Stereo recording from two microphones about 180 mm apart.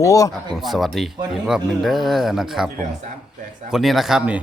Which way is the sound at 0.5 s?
Centre (ahead or behind).